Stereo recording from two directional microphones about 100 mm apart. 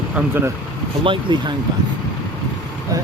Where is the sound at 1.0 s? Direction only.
55° right (ahead or behind).